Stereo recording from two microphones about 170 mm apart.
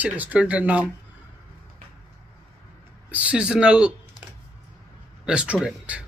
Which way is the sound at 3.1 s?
10° right (ahead or behind).